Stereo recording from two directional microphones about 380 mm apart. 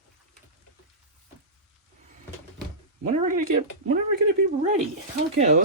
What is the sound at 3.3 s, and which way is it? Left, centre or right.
Speech, right.